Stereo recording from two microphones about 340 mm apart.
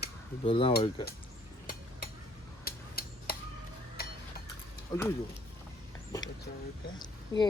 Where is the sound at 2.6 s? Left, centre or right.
Left.